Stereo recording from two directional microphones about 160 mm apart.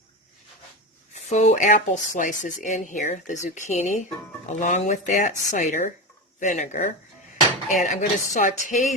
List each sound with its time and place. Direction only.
1.1 s speech: 45° left (ahead or behind)